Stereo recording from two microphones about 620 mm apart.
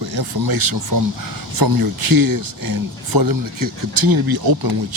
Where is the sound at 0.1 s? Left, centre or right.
Right.